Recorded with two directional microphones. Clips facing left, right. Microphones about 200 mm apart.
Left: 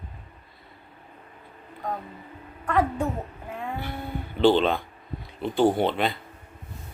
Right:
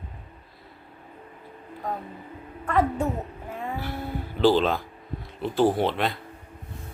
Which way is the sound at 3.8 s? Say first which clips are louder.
Right 1 dB; centre (ahead or behind).